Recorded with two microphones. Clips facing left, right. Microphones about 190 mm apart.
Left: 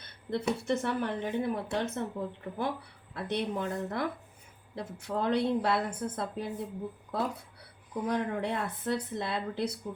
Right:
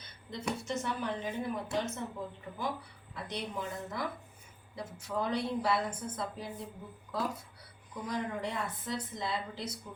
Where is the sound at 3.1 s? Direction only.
60° left (ahead or behind).